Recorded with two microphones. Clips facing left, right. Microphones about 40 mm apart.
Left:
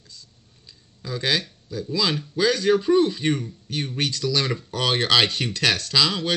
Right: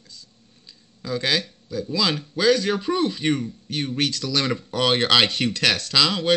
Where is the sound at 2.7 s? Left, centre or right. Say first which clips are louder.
Left 4 dB; centre.